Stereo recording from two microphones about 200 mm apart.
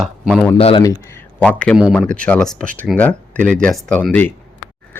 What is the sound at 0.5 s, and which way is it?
Speech, 25° left (ahead or behind).